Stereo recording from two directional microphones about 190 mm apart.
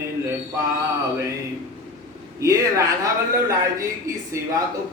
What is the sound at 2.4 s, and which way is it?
Speech, 15° right (ahead or behind).